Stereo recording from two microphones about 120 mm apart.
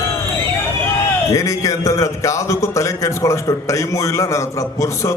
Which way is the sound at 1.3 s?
25° left (ahead or behind).